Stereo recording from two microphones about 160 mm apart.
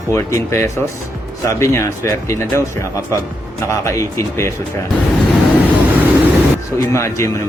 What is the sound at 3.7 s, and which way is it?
Speech, 20° left (ahead or behind).